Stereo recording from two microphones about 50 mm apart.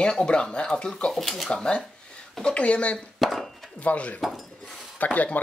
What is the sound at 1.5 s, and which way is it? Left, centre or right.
Speech, centre.